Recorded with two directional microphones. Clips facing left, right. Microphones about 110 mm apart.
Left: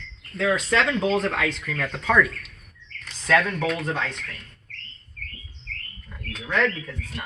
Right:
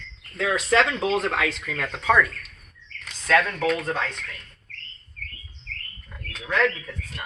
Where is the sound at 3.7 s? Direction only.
Centre (ahead or behind).